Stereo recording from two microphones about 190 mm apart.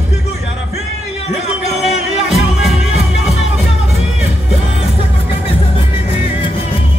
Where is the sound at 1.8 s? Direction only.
Centre (ahead or behind).